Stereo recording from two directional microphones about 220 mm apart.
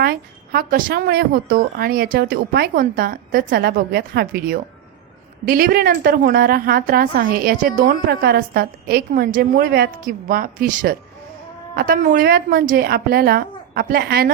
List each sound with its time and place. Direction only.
0.0 s a woman's voice: 45° right (ahead or behind)